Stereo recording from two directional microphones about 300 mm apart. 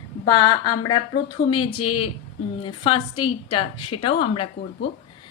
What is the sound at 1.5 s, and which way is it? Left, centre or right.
A woman's voice, centre.